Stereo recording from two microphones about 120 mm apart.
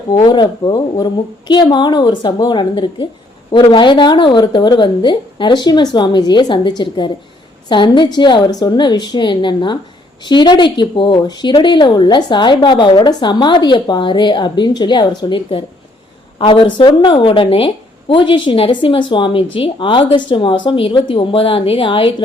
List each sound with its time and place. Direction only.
0.2 s speech: 40° left (ahead or behind)